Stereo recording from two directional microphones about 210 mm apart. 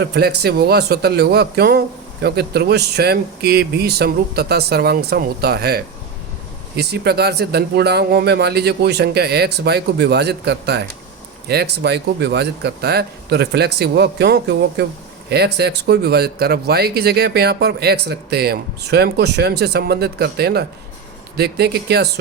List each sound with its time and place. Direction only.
0.0 s speech: 50° right (ahead or behind)